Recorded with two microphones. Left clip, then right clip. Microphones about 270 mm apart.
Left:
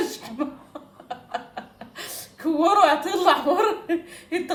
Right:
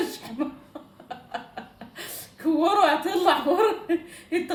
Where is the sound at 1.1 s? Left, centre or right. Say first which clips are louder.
Left 3 dB; centre.